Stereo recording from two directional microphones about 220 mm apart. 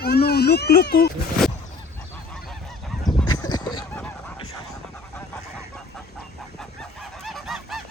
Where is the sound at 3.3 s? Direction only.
20° left (ahead or behind).